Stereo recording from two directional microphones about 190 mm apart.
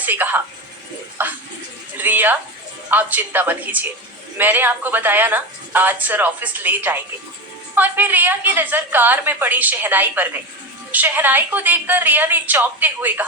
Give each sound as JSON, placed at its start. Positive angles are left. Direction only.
{"t": 0.0, "sound": "speech", "side_deg": -10}